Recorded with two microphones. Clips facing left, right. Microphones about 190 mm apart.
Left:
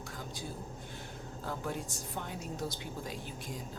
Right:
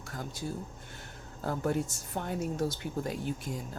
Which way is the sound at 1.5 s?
45° right (ahead or behind).